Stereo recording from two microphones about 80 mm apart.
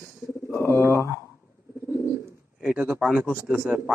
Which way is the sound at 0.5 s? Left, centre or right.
Right.